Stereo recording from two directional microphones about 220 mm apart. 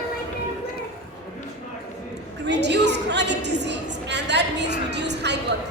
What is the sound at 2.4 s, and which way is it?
A woman's voice, 50° right (ahead or behind).